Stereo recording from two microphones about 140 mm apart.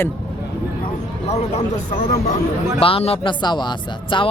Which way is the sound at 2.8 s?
40° left (ahead or behind).